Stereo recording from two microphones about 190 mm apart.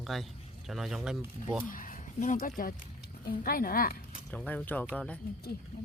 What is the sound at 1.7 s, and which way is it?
A woman's voice, 45° left (ahead or behind).